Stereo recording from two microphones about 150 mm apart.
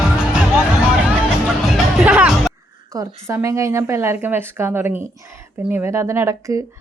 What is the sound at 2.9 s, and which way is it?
A woman's voice, 20° right (ahead or behind).